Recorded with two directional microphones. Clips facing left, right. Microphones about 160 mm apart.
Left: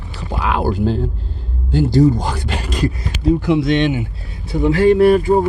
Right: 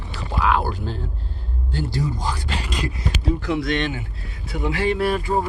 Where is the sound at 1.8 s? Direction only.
60° left (ahead or behind).